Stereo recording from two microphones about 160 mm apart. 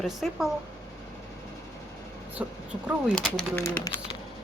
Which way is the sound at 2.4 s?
5° right (ahead or behind).